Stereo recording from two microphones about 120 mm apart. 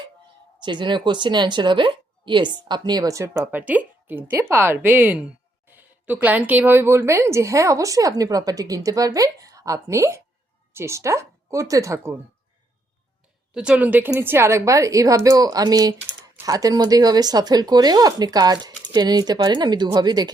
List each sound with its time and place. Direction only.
0.6 s speech: 40° right (ahead or behind)
3.4 s a woman's voice: 15° right (ahead or behind)
13.5 s a woman's voice: 5° right (ahead or behind); by 20.3 s 35° right (ahead or behind)